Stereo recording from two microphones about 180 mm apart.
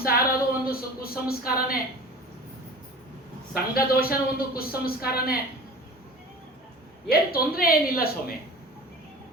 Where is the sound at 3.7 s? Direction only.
55° left (ahead or behind).